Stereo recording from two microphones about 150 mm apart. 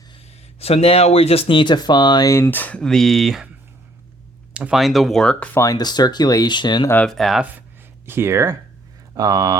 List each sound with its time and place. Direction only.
0.6 s speech: 40° left (ahead or behind); by 3.5 s centre (ahead or behind)
4.5 s speech: 5° right (ahead or behind)
5.5 s speech: 25° left (ahead or behind)
6.9 s speech: 5° left (ahead or behind)
8.0 s speech: 15° right (ahead or behind)
9.1 s mantra: 25° right (ahead or behind)